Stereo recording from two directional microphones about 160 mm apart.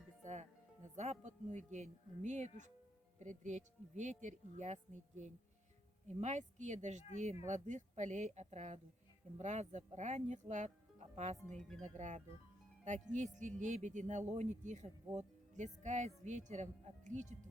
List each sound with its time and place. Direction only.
0.2 s music: 45° right (ahead or behind)
0.9 s speech: 45° right (ahead or behind)